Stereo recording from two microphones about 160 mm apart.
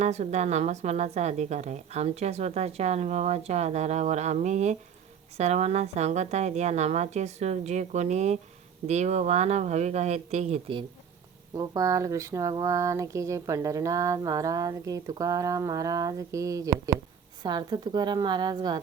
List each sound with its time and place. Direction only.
0.0 s a woman's voice: 45° right (ahead or behind)
11.5 s speech: 20° right (ahead or behind)